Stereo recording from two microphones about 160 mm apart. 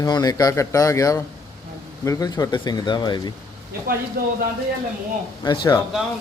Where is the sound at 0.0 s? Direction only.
25° left (ahead or behind).